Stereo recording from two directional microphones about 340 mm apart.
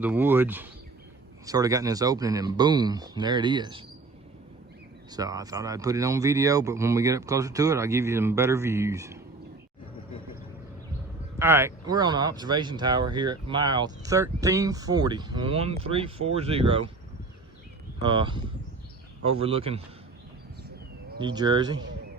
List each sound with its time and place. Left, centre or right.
0.0 s speech: centre
5.1 s speech: centre
11.3 s speech: centre
18.0 s speech: centre
21.2 s speech: centre